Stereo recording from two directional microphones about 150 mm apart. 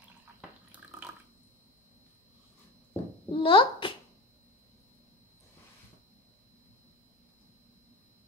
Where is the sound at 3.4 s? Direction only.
35° left (ahead or behind).